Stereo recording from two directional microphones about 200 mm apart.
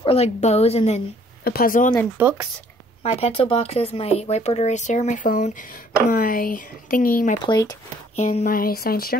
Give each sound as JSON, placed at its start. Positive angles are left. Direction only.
{"t": 0.0, "sound": "speech", "side_deg": 30}
{"t": 1.4, "sound": "speech", "side_deg": 50}
{"t": 2.1, "sound": "speech", "side_deg": -10}
{"t": 3.0, "sound": "speech", "side_deg": 30}
{"t": 7.4, "sound": "speech", "side_deg": 20}
{"t": 8.2, "sound": "speech", "side_deg": 40}